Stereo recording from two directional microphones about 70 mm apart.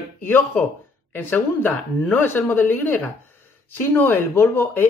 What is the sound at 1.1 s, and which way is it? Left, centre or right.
Speech, left.